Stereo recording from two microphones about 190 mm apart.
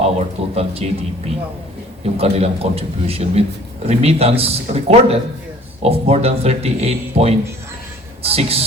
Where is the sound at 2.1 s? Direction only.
30° right (ahead or behind).